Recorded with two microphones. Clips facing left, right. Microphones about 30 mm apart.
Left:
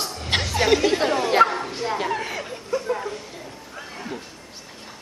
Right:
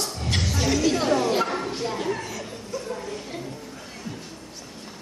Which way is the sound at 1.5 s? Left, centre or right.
Centre.